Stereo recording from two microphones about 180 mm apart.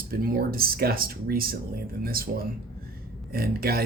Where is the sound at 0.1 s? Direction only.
55° right (ahead or behind).